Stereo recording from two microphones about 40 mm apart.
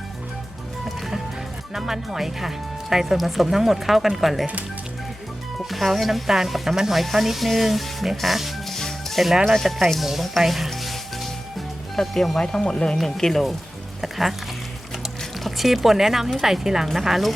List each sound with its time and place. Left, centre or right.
1.7 s speech: centre
5.5 s speech: centre
8.7 s music: centre
9.2 s speech: centre
14.0 s music: centre
15.4 s speech: centre